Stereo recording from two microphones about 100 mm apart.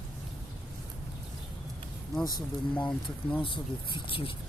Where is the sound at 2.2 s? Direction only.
45° left (ahead or behind).